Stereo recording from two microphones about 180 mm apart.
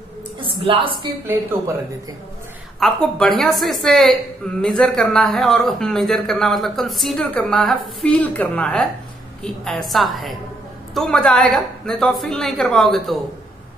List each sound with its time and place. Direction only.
0.7 s a woman's voice: 30° right (ahead or behind)
2.8 s a woman's voice: 5° left (ahead or behind)